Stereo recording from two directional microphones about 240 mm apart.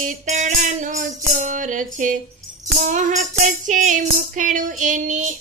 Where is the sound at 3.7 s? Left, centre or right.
Right.